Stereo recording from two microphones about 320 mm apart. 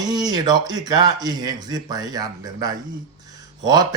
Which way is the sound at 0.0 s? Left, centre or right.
Centre.